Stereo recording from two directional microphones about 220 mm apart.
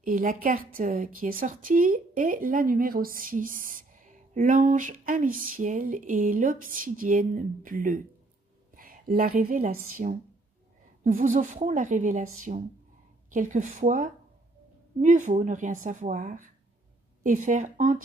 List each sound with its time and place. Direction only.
0.0 s a woman's voice: 40° right (ahead or behind)